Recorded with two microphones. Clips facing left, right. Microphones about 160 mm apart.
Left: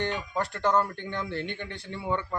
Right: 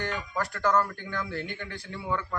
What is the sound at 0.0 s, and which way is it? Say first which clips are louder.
Speech: left 2 dB; 25° left (ahead or behind).